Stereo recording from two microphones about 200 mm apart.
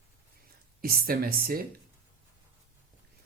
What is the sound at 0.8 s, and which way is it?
Speech, 50° right (ahead or behind).